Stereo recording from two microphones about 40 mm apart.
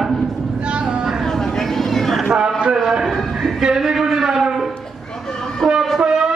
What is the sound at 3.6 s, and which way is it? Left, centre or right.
A man's voice, centre.